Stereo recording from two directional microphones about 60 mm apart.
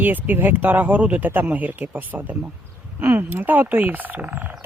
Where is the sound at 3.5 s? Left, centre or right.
Right.